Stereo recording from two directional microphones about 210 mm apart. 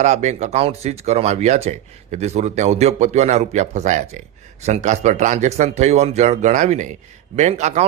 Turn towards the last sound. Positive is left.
turn(degrees=-30)  # may be behind; listen again after turning